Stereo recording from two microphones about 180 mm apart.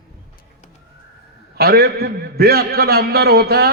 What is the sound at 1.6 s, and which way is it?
A man's voice, 60° right (ahead or behind).